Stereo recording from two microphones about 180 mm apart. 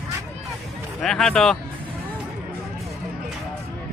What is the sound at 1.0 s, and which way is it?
Speech, 5° left (ahead or behind).